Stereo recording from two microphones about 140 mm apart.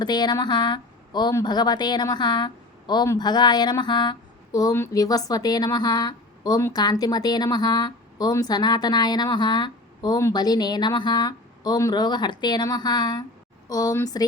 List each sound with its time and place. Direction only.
0.0 s a woman's voice: 30° left (ahead or behind)